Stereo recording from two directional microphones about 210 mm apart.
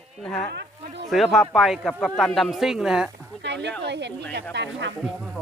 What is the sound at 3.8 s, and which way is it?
Speech, 55° right (ahead or behind).